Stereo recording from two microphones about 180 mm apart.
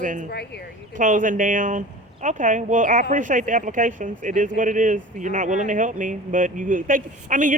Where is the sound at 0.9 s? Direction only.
45° right (ahead or behind).